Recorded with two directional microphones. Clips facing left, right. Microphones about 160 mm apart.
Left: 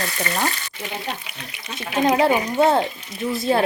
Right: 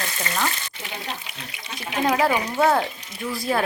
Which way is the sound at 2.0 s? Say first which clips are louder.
Left 3 dB; 25° left (ahead or behind).